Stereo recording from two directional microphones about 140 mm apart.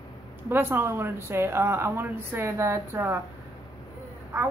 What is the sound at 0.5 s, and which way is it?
Speech, 15° right (ahead or behind).